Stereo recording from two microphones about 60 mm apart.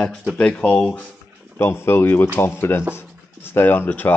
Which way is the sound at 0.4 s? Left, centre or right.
Centre.